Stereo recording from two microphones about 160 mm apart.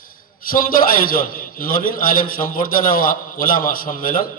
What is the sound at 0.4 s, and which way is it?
A man's voice, 60° left (ahead or behind).